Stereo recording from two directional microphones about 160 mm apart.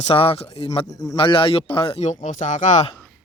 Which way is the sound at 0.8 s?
20° left (ahead or behind).